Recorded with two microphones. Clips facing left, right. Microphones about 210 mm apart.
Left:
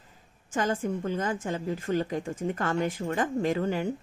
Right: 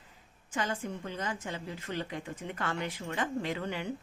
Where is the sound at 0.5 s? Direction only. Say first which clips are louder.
Left 7 dB; 45° left (ahead or behind).